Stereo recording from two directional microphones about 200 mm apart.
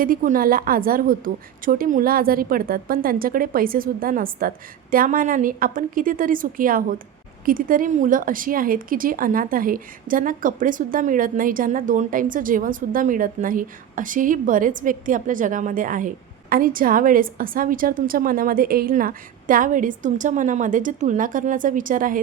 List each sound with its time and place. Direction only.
0.0 s a woman's voice: 45° right (ahead or behind)